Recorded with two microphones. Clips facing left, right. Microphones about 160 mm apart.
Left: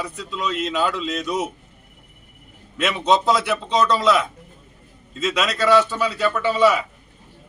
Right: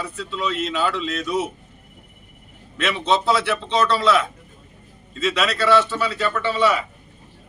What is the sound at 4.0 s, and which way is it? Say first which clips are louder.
Speech: even; centre (ahead or behind).